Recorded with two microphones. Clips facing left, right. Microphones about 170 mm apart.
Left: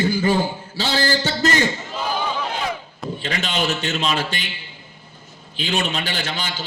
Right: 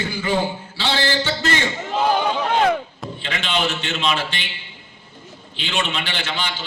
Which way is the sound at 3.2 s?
40° left (ahead or behind).